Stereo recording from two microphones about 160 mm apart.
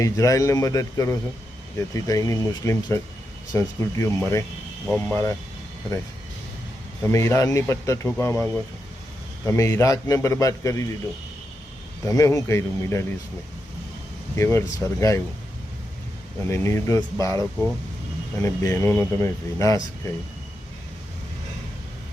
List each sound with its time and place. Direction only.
0.0 s a man's voice: 20° left (ahead or behind)
7.0 s a man's voice: 15° left (ahead or behind)
12.0 s a man's voice: 20° left (ahead or behind)
14.3 s speech: 15° left (ahead or behind)
16.5 s a man's voice: 15° left (ahead or behind)